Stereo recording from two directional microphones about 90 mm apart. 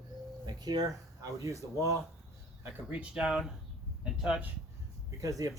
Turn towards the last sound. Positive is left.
turn(degrees=-40)  # may be behind; listen again after turning